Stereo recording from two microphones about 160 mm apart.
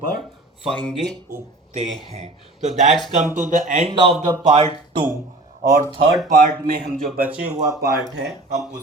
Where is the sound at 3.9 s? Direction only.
30° right (ahead or behind).